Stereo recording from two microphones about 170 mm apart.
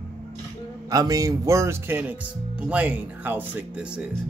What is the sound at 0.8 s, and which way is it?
Speech, 20° right (ahead or behind).